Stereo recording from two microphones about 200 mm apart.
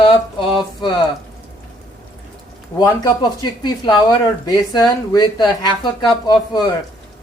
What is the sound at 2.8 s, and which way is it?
Speech, 20° left (ahead or behind).